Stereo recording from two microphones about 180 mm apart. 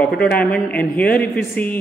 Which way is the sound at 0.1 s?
60° left (ahead or behind).